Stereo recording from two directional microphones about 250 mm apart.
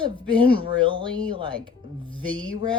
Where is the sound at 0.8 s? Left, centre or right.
Centre.